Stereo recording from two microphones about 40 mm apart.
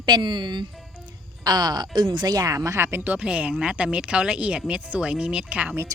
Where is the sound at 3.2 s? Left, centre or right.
Right.